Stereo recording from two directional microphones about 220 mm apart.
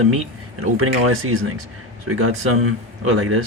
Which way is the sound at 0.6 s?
75° right (ahead or behind).